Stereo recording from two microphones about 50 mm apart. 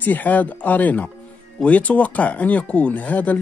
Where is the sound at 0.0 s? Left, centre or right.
Left.